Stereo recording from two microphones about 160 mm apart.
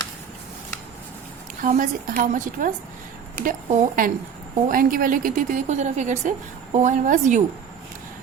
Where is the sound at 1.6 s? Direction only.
55° right (ahead or behind).